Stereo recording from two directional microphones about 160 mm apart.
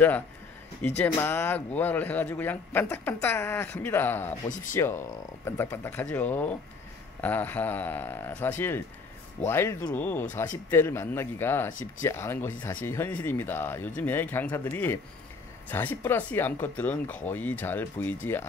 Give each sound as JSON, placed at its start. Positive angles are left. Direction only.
{"t": 0.8, "sound": "speech", "side_deg": 15}